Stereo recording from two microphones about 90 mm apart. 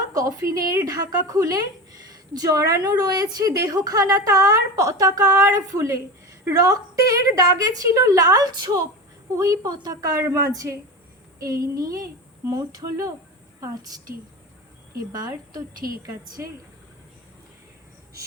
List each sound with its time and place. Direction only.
0.1 s a woman's voice: 40° right (ahead or behind)
14.9 s speech: 45° right (ahead or behind)